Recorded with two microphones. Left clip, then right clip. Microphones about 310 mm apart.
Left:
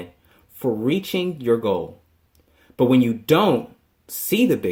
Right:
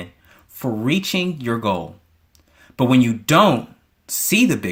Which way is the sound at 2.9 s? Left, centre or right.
Right.